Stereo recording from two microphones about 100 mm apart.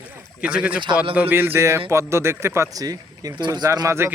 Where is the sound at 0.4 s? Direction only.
10° right (ahead or behind); by 4.1 s 30° right (ahead or behind).